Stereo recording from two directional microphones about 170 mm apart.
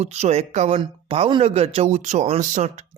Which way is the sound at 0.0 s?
40° right (ahead or behind).